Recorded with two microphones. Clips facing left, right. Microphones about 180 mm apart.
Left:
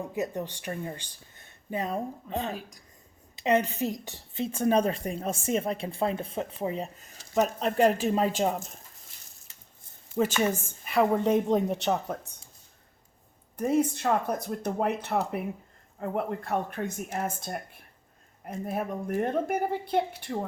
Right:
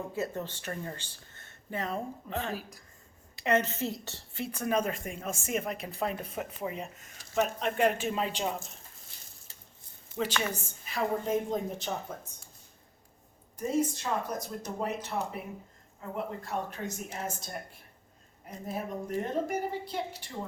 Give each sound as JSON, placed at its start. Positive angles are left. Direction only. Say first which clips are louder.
{"t": 0.1, "sound": "a woman's voice", "louder": "left 3 dB", "side_deg": 15}
{"t": 10.2, "sound": "a woman's voice", "louder": "left 6 dB", "side_deg": 45}
{"t": 13.6, "sound": "speech", "louder": "left 4 dB", "side_deg": 60}